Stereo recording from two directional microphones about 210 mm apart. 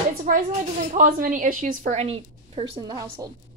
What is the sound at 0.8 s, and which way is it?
A woman's voice, 40° right (ahead or behind).